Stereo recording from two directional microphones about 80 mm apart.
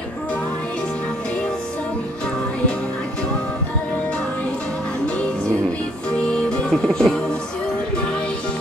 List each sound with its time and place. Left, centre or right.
6.3 s music: centre